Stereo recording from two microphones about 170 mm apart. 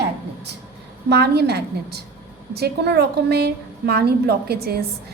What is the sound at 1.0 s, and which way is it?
A woman's voice, 75° right (ahead or behind).